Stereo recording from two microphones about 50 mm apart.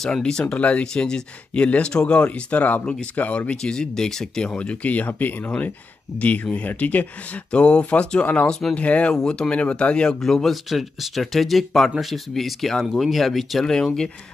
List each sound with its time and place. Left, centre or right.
0.0 s speech: centre; by 2.8 s left
2.8 s speech: centre
9.1 s speech: centre
10.2 s speech: centre
13.8 s speech: centre